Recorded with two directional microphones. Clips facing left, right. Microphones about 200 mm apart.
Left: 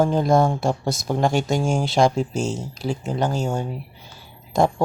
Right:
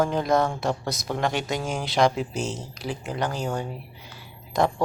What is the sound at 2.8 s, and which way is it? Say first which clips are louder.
Speech: left 5 dB; 25° left (ahead or behind).